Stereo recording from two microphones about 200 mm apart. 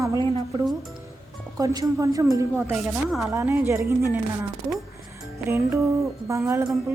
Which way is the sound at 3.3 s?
15° right (ahead or behind).